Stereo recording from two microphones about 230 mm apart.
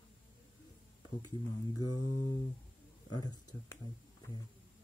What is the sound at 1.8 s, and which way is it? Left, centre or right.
Speech, centre.